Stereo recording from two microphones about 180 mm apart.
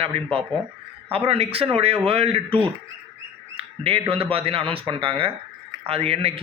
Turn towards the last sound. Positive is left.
turn(degrees=-35)  # may be behind; listen again after turning